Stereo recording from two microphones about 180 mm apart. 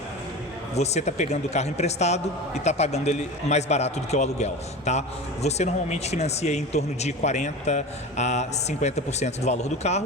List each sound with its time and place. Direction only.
0.8 s a man's voice: 40° left (ahead or behind)